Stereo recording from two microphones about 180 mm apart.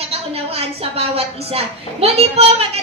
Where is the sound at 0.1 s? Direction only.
35° right (ahead or behind).